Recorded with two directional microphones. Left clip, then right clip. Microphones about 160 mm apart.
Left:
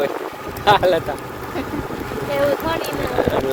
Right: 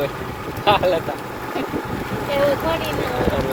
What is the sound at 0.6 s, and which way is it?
Speech, 70° left (ahead or behind).